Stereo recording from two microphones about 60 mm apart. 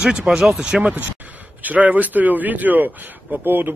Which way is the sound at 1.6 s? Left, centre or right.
Right.